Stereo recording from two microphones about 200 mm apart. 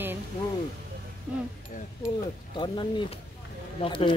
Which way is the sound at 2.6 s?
25° left (ahead or behind).